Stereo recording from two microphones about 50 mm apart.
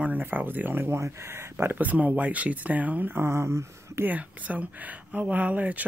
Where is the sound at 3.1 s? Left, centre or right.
Right.